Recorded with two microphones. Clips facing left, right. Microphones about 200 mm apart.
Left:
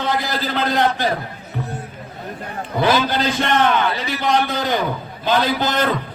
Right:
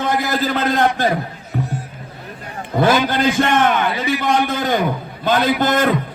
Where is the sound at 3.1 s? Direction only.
50° right (ahead or behind).